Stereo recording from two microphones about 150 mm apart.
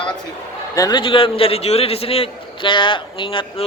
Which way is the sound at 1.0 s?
35° left (ahead or behind).